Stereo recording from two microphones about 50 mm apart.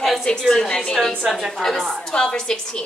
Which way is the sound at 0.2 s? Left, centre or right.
Centre.